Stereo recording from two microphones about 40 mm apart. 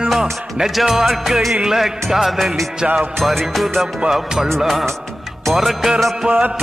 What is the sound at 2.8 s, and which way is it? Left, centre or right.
Music, right.